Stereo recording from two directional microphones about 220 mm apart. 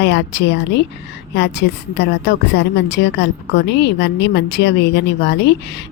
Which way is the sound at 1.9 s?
55° left (ahead or behind).